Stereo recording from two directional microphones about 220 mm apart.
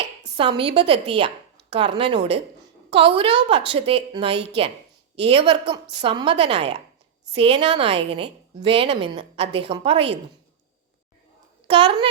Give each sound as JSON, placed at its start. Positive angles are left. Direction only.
{"t": 0.2, "sound": "a woman's voice", "side_deg": -20}
{"t": 11.7, "sound": "a woman's voice", "side_deg": -25}